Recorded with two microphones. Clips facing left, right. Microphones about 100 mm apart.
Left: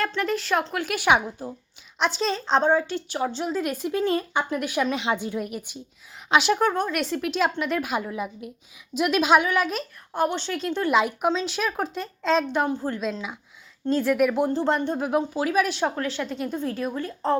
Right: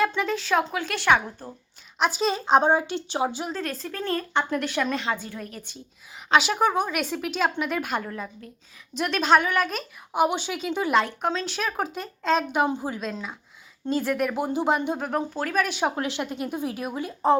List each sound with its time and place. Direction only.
0.0 s speech: 5° right (ahead or behind); by 1.5 s 15° left (ahead or behind)
2.0 s speech: 5° right (ahead or behind); by 3.3 s 25° right (ahead or behind)
3.3 s speech: centre (ahead or behind)
3.6 s speech: 15° left (ahead or behind)
5.0 s speech: 20° left (ahead or behind)
6.3 s speech: centre (ahead or behind)
10.1 s speech: 15° right (ahead or behind)
13.0 s speech: centre (ahead or behind)
14.9 s speech: 5° left (ahead or behind)
16.0 s speech: 15° right (ahead or behind)